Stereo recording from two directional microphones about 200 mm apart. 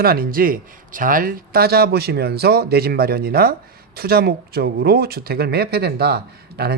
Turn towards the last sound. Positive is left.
turn(degrees=-50)  # may be behind; listen again after turning